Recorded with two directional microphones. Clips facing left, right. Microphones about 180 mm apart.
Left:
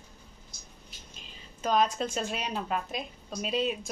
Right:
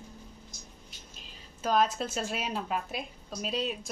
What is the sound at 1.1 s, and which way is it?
Speech, 5° right (ahead or behind).